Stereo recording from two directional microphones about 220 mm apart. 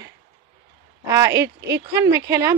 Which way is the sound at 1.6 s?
15° right (ahead or behind).